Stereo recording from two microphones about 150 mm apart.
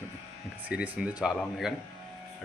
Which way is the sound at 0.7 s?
10° right (ahead or behind).